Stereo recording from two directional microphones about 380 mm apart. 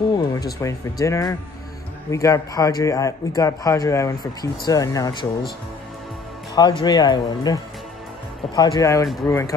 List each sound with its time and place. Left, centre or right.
0.1 s a sound: centre
0.6 s a man's voice: centre
6.5 s a man's voice: centre
8.5 s a man's voice: centre